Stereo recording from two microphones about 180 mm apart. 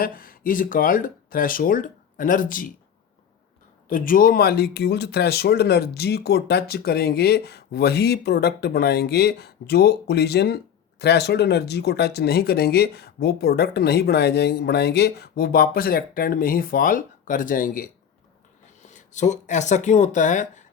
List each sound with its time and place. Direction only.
0.0 s speech: 50° left (ahead or behind)
3.8 s speech: 50° left (ahead or behind)